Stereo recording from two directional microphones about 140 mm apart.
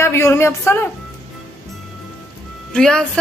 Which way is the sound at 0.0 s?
20° left (ahead or behind).